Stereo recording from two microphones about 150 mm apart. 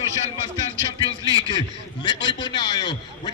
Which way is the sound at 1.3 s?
25° right (ahead or behind).